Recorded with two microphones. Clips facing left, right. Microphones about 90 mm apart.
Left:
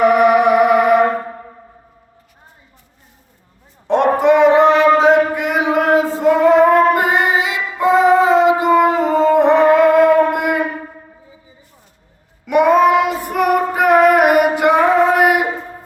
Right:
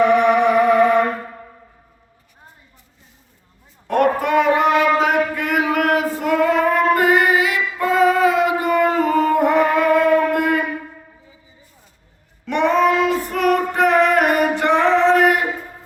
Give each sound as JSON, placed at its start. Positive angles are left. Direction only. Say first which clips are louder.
{"t": 0.0, "sound": "music", "louder": "left 3 dB", "side_deg": 10}
{"t": 3.8, "sound": "a sound", "louder": "left 5 dB", "side_deg": 25}
{"t": 10.3, "sound": "shofar", "louder": "left 1 dB", "side_deg": 20}
{"t": 12.5, "sound": "child singing", "louder": "left 5 dB", "side_deg": 10}